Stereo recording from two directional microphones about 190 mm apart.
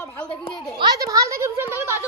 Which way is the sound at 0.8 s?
20° right (ahead or behind).